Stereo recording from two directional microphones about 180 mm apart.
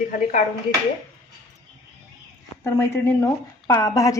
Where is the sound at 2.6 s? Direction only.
15° left (ahead or behind).